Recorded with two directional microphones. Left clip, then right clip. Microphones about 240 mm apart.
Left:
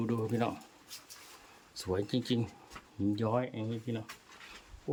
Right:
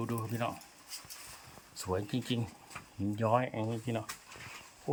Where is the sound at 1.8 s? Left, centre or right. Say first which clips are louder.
Left 2 dB; centre.